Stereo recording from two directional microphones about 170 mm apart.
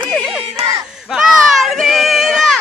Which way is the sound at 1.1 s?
Centre (ahead or behind).